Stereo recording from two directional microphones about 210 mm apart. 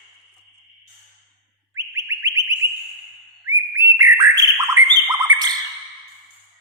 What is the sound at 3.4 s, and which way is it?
Whistle, 15° right (ahead or behind).